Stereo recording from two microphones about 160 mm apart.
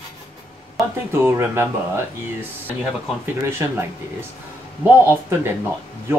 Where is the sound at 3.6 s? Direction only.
15° right (ahead or behind).